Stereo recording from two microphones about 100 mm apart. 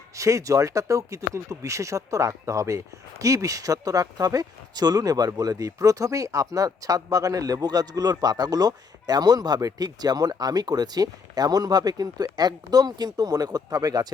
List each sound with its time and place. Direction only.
0.2 s speech: 30° right (ahead or behind)